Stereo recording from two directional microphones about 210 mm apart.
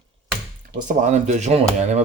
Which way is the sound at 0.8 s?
35° right (ahead or behind).